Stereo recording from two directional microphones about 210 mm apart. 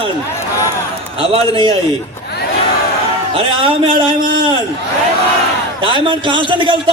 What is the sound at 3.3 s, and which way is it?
Speech, 25° right (ahead or behind).